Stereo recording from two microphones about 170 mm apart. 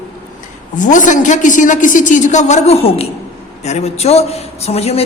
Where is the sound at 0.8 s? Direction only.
50° left (ahead or behind).